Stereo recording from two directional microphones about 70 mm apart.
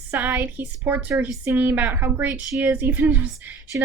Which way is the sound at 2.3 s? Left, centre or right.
Right.